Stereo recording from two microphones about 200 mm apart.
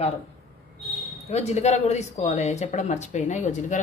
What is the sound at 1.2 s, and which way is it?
Speech, 35° left (ahead or behind).